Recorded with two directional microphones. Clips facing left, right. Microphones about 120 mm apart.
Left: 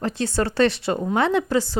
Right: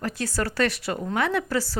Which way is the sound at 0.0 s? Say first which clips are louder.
Left 5 dB; 25° left (ahead or behind).